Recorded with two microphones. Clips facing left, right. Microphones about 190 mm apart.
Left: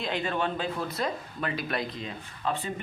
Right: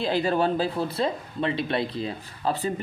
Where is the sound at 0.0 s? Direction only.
35° right (ahead or behind).